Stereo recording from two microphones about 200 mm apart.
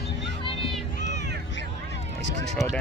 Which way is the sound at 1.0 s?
60° right (ahead or behind).